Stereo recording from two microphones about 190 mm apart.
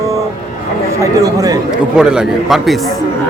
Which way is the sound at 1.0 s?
20° right (ahead or behind).